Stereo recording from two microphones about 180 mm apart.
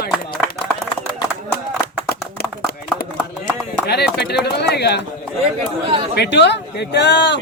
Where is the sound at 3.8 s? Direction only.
65° left (ahead or behind).